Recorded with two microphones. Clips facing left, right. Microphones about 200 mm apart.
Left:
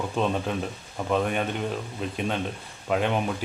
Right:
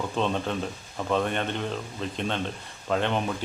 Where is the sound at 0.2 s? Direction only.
5° left (ahead or behind).